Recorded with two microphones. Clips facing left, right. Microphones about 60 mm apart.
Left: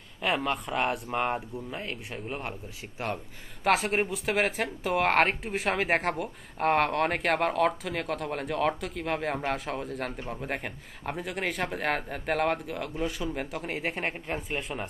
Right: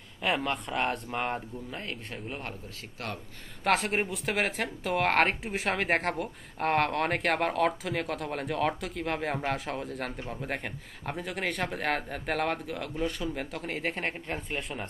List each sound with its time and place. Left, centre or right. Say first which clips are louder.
0.2 s speech: left 1 dB; centre
3.0 s a man's voice: left 5 dB; left
3.6 s speech: left 2 dB; centre